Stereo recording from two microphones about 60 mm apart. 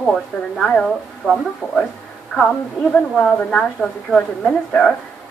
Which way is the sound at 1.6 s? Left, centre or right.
Left.